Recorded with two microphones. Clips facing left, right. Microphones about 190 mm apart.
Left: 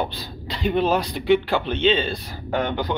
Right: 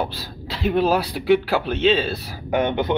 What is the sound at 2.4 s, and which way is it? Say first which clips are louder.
Speech: right 3 dB; 20° right (ahead or behind).